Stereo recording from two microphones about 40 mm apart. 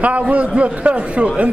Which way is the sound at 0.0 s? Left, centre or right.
Right.